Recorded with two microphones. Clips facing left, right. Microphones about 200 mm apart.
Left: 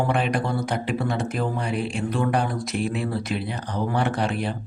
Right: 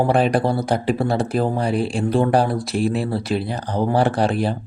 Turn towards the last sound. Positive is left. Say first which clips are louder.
# right 6 dB
turn(degrees=-35)  # may be behind; listen again after turning